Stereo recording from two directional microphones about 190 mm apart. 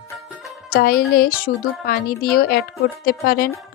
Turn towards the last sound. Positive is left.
turn(degrees=50)  # may be behind; listen again after turning